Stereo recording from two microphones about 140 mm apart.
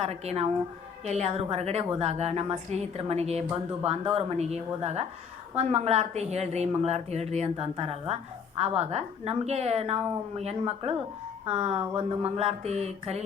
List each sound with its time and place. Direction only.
0.0 s a woman's voice: 50° right (ahead or behind)